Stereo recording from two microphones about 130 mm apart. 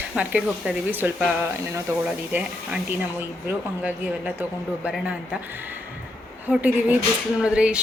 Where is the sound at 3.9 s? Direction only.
10° right (ahead or behind).